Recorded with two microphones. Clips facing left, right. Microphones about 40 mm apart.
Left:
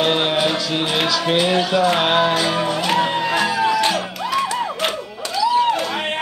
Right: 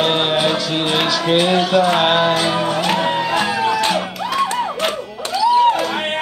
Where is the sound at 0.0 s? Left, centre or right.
Centre.